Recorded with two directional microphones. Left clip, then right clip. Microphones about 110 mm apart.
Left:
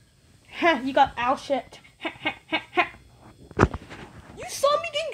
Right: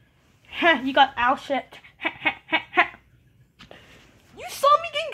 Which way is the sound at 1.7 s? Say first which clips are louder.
Right 5 dB; 15° left (ahead or behind).